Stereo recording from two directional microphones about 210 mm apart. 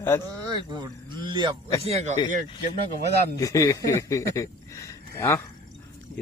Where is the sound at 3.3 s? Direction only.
15° left (ahead or behind).